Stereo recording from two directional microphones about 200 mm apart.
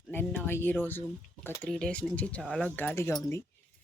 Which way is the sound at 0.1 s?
10° left (ahead or behind).